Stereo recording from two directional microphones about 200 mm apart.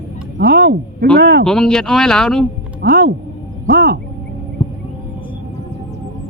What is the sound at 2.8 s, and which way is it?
Speech, 55° right (ahead or behind).